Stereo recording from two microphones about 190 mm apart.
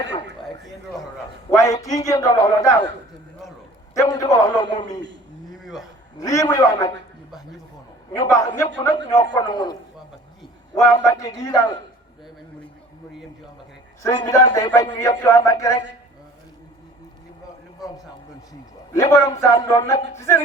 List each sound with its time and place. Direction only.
0.0 s a man's voice: 25° left (ahead or behind)
0.4 s speech: centre (ahead or behind)
1.5 s speech: 15° left (ahead or behind)
3.9 s a man's voice: 15° left (ahead or behind)
5.5 s a sound: centre (ahead or behind)
6.1 s speech: 15° left (ahead or behind)
8.1 s a man's voice: 15° left (ahead or behind)
10.8 s speech: 15° left (ahead or behind)
14.3 s speech: 15° left (ahead or behind)
18.9 s speech: 15° left (ahead or behind)